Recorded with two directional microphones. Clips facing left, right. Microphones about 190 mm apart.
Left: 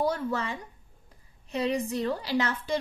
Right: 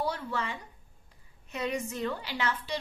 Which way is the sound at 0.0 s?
40° left (ahead or behind).